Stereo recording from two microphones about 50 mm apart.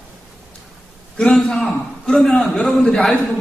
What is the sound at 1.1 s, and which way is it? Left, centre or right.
Speech, centre.